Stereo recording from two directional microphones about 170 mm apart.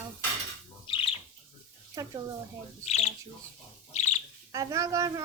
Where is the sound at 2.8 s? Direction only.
40° left (ahead or behind).